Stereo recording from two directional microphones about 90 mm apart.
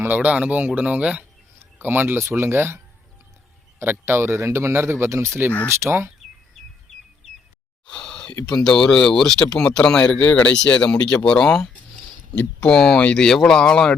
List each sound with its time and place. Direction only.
0.0 s speech: 20° right (ahead or behind)
7.9 s a sound: 10° left (ahead or behind)
8.4 s speech: 10° left (ahead or behind)
12.3 s speech: 15° left (ahead or behind)